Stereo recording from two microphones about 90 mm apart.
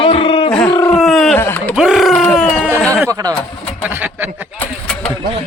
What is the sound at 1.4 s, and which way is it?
Speech, 25° left (ahead or behind).